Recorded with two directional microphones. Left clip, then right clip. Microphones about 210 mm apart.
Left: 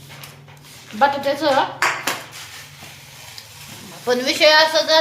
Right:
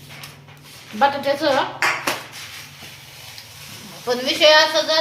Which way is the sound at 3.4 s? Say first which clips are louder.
Left 1 dB; 15° left (ahead or behind).